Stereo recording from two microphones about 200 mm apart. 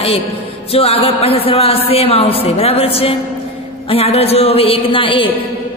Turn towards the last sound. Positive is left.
turn(degrees=25)  # may be behind; listen again after turning